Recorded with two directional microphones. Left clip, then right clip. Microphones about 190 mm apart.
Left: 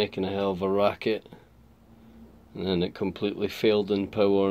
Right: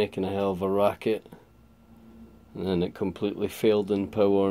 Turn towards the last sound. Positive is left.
turn(degrees=-10)  # may be behind; listen again after turning